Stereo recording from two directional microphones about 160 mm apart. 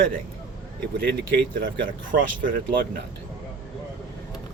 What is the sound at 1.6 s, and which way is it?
Speech, 60° right (ahead or behind).